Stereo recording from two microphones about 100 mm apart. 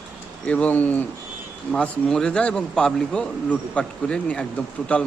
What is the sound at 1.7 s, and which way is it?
Speech, 5° left (ahead or behind).